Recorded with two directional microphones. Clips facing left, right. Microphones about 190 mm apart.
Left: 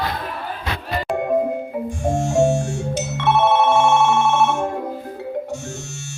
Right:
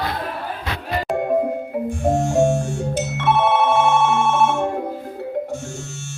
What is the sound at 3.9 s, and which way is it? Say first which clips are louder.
Telephone bell ringing: left 1 dB; 55° right (ahead or behind).